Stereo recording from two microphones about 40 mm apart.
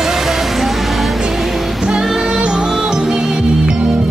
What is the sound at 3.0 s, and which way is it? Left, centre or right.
Music, centre.